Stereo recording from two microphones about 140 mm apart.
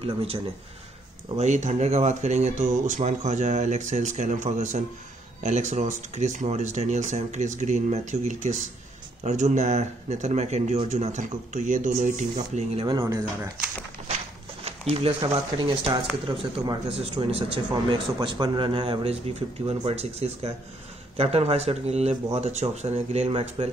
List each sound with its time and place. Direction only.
0.0 s a man's voice: 40° right (ahead or behind)
1.4 s speech: 55° right (ahead or behind)
13.0 s speech: 20° right (ahead or behind)
14.6 s a man's voice: 45° right (ahead or behind)